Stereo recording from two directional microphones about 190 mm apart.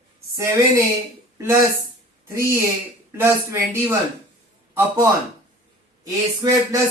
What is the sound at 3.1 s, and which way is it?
Speech, 10° right (ahead or behind).